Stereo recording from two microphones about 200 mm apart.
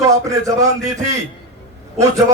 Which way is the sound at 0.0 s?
15° right (ahead or behind).